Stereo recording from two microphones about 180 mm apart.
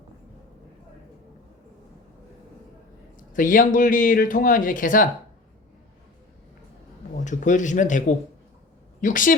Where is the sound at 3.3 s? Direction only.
50° left (ahead or behind).